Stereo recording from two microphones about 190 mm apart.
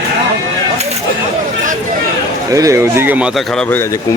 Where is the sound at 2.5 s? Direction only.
15° right (ahead or behind); by 4.0 s 10° left (ahead or behind).